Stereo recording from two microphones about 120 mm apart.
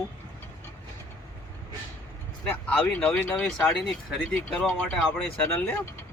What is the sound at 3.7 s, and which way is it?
Speech, centre (ahead or behind).